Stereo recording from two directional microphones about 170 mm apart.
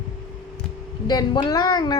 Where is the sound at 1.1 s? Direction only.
25° left (ahead or behind).